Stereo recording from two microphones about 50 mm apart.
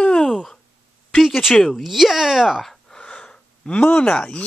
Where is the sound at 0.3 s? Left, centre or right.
Centre.